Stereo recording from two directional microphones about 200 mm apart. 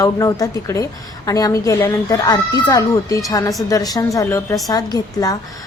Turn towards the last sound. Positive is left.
turn(degrees=20)  # may be behind; listen again after turning